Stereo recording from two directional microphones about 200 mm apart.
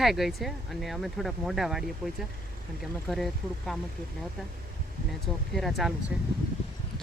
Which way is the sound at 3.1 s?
Centre (ahead or behind).